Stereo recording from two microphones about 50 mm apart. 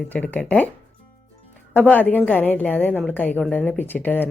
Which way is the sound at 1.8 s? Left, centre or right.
Left.